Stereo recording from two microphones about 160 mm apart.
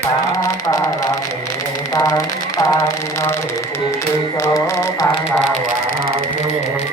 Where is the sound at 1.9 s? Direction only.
20° left (ahead or behind).